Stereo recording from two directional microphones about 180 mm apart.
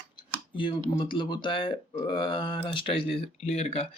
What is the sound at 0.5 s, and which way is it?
Speech, 25° left (ahead or behind).